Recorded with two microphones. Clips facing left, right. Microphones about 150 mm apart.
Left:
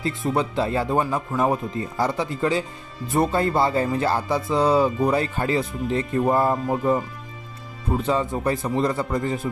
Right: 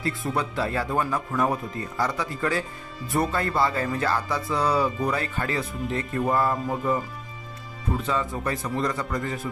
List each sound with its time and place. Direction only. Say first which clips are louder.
0.0 s speech: left 4 dB; 20° left (ahead or behind)
8.1 s speech: left 6 dB; 30° left (ahead or behind)